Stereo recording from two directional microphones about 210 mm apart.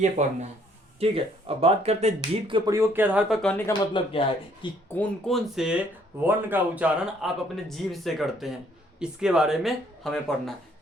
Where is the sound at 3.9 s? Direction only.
25° left (ahead or behind).